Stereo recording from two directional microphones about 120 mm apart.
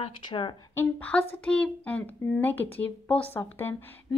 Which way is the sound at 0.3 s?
40° left (ahead or behind).